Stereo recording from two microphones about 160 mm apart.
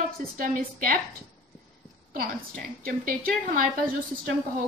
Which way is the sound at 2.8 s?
60° right (ahead or behind).